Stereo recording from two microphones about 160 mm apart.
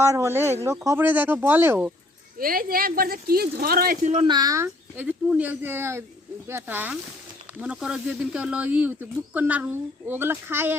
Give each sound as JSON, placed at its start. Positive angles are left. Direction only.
{"t": 0.0, "sound": "speech", "side_deg": -15}
{"t": 2.4, "sound": "speech", "side_deg": -65}
{"t": 4.0, "sound": "speech", "side_deg": -45}
{"t": 4.3, "sound": "speech", "side_deg": -25}
{"t": 4.9, "sound": "speech", "side_deg": -10}